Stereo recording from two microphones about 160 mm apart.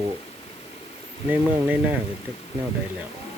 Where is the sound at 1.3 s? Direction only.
10° right (ahead or behind).